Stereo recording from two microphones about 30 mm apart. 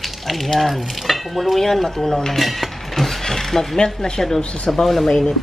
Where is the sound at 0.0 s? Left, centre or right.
Centre.